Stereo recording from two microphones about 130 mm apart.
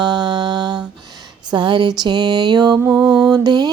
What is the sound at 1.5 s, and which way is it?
Music, 35° right (ahead or behind).